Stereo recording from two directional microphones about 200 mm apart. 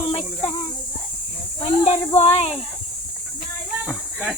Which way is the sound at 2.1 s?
30° left (ahead or behind).